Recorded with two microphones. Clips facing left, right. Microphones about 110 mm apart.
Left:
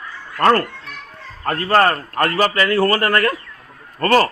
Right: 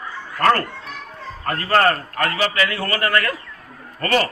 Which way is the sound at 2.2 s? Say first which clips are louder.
Left 6 dB; 45° left (ahead or behind).